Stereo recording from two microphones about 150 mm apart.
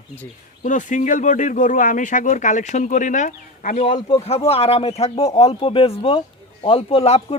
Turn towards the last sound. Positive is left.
turn(degrees=45)  # may be behind; listen again after turning